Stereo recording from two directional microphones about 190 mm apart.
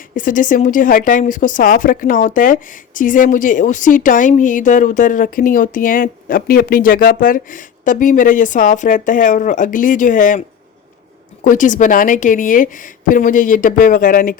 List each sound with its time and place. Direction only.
0.2 s a woman's voice: 45° left (ahead or behind)
11.4 s a woman's voice: 40° left (ahead or behind)